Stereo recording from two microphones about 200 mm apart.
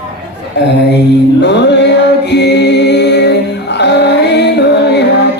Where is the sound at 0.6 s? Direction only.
60° left (ahead or behind).